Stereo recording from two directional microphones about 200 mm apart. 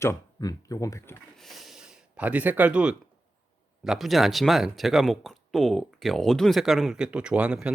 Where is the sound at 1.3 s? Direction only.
Centre (ahead or behind).